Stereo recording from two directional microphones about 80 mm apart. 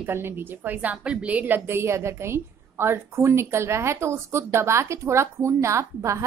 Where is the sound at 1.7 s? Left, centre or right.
Right.